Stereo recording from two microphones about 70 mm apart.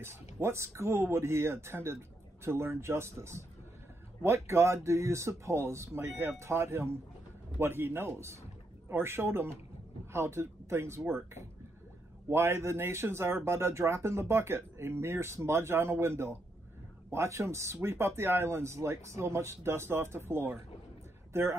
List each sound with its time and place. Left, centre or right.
0.0 s speech: right
12.3 s a man's voice: right